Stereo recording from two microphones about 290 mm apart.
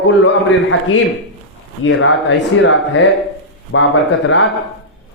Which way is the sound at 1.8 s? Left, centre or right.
Left.